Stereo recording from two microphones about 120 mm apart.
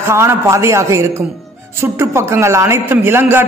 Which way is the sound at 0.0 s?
20° right (ahead or behind).